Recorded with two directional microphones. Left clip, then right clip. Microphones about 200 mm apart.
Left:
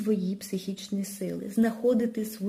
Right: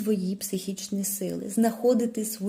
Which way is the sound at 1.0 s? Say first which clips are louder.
Right 4 dB; 55° right (ahead or behind).